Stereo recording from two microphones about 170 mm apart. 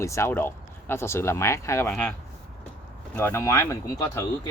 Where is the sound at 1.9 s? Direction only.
5° left (ahead or behind).